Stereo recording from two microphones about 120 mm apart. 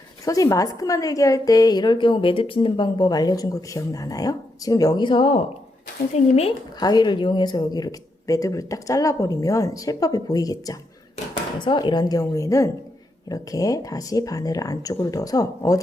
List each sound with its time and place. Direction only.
0.3 s a woman's voice: 30° left (ahead or behind); by 5.4 s 45° left (ahead or behind)
6.1 s speech: 60° left (ahead or behind)
6.7 s a woman's voice: 35° left (ahead or behind)
11.6 s a woman's voice: 40° left (ahead or behind)